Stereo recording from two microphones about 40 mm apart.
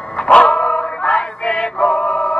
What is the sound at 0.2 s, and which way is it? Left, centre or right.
Music, left.